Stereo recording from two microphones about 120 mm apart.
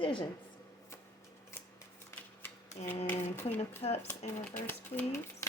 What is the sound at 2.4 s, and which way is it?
Typewriter, 20° left (ahead or behind).